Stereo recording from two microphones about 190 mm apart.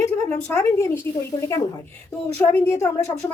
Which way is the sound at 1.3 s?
25° left (ahead or behind).